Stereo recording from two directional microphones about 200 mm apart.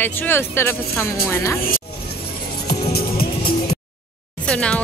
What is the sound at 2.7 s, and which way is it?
Music, 50° left (ahead or behind).